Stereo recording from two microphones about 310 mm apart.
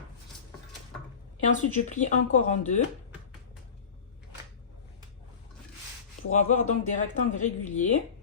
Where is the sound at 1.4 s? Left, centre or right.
Left.